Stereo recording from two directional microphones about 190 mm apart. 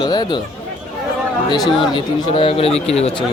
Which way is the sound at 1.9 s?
30° left (ahead or behind).